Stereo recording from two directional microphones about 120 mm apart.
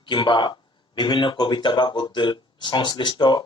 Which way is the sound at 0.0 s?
40° left (ahead or behind).